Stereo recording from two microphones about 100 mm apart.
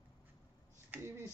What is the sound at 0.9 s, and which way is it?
Finger snapping, 25° right (ahead or behind).